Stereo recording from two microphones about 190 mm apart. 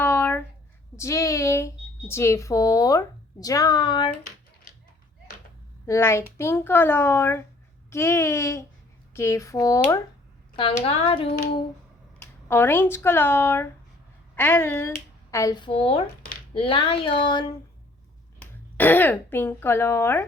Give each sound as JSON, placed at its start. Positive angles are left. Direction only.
{"t": 0.0, "sound": "a sound", "side_deg": 10}
{"t": 0.9, "sound": "speech", "side_deg": 15}
{"t": 5.8, "sound": "a child's voice", "side_deg": 15}
{"t": 12.2, "sound": "a child's voice", "side_deg": 10}
{"t": 18.3, "sound": "speech", "side_deg": 10}